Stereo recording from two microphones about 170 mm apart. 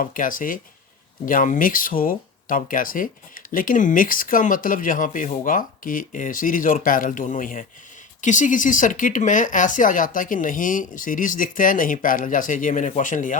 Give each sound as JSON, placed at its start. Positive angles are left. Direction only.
{"t": 0.0, "sound": "speech", "side_deg": 50}